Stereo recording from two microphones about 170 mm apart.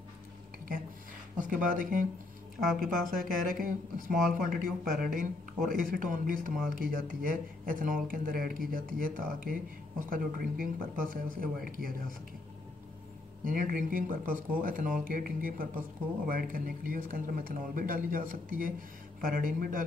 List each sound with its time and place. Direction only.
1.3 s speech: 50° right (ahead or behind)
13.5 s speech: 55° right (ahead or behind)